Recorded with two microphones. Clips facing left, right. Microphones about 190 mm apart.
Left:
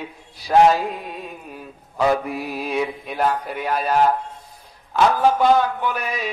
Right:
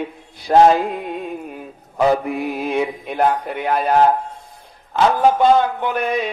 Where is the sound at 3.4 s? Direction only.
55° right (ahead or behind).